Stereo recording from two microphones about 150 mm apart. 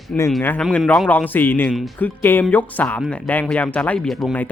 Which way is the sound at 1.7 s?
Centre (ahead or behind).